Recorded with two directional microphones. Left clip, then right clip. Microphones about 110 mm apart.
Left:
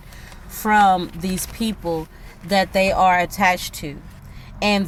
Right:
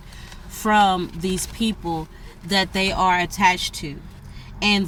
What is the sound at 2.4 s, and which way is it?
Speech, 55° left (ahead or behind).